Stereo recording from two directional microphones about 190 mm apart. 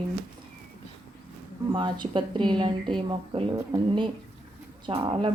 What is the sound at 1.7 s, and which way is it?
A woman's voice, 25° right (ahead or behind).